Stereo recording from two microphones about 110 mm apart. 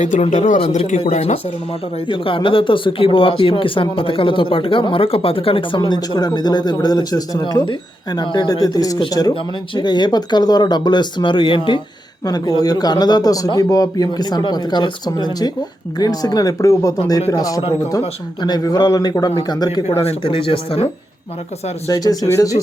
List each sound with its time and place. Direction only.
0.0 s speech: 90° left
2.0 s speech: 50° left (ahead or behind)
5.8 s speech: 40° left (ahead or behind)
12.2 s speech: 35° left (ahead or behind)
19.9 s speech: 65° left (ahead or behind)
21.8 s speech: 35° left (ahead or behind)